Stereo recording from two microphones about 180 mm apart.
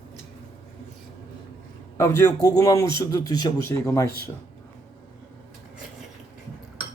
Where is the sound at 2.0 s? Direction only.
15° left (ahead or behind).